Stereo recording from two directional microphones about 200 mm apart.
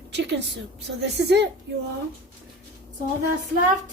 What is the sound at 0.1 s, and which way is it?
Speech, 60° right (ahead or behind).